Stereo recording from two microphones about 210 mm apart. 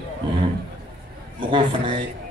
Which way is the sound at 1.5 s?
25° right (ahead or behind).